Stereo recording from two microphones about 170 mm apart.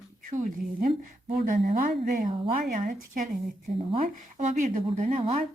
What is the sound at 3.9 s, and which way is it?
A woman's voice, 40° right (ahead or behind).